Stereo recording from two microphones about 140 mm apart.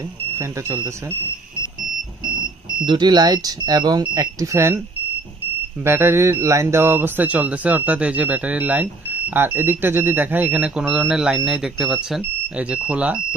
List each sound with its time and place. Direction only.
2.8 s speech: 35° right (ahead or behind)
5.8 s speech: 15° right (ahead or behind)